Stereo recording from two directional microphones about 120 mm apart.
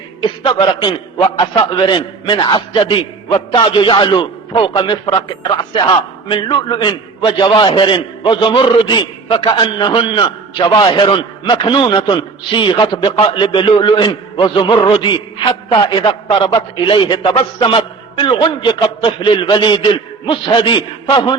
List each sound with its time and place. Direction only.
0.2 s a man's voice: 40° left (ahead or behind)